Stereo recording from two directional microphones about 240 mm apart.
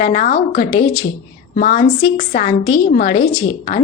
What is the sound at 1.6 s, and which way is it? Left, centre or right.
A woman's voice, left.